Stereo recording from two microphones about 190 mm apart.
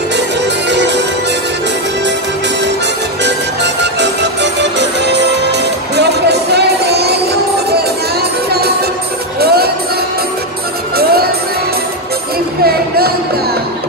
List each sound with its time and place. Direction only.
0.7 s music: 65° right (ahead or behind)
3.3 s music: 65° right (ahead or behind)
8.5 s music: 55° right (ahead or behind)
12.6 s music: 55° right (ahead or behind)